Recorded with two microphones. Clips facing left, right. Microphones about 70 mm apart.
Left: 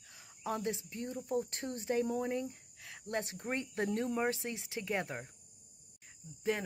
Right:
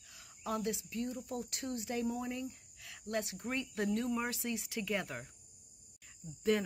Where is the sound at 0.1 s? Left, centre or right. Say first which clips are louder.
Even; left.